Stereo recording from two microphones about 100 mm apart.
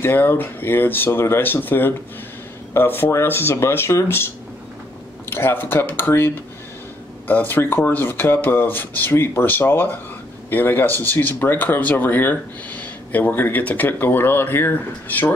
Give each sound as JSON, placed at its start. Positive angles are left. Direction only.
{"t": 0.0, "sound": "speech", "side_deg": 20}
{"t": 5.2, "sound": "speech", "side_deg": 25}